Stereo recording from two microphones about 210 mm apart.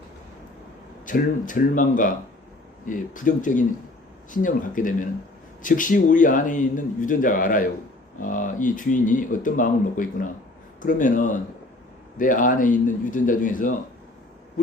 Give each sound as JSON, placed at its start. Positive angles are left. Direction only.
{"t": 1.0, "sound": "a man's voice", "side_deg": 40}